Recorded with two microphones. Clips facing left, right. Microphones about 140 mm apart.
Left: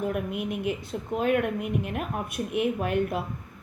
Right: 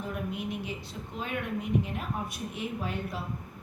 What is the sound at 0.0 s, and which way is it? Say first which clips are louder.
Speech: left 6 dB; 60° left (ahead or behind).